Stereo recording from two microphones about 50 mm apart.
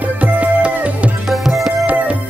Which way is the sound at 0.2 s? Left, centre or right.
Right.